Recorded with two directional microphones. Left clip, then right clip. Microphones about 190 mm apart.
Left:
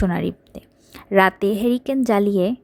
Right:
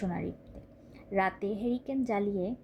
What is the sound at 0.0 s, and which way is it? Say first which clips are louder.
A woman's voice: left 13 dB; 45° left (ahead or behind).